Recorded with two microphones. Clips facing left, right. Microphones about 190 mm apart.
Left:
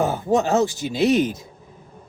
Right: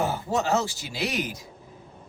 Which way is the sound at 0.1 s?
20° left (ahead or behind).